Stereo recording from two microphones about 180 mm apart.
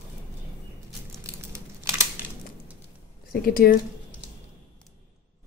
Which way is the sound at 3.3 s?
55° left (ahead or behind).